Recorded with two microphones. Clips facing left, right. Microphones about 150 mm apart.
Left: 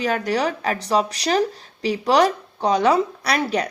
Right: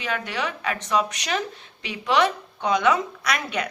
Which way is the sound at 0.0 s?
40° left (ahead or behind).